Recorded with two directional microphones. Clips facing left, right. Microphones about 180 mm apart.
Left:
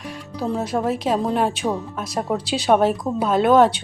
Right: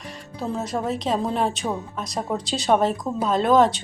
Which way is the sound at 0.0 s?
Centre (ahead or behind).